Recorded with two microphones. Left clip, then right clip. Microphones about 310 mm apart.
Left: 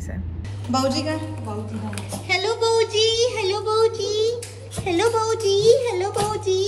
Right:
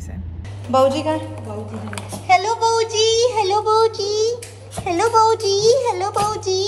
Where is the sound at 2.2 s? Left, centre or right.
Right.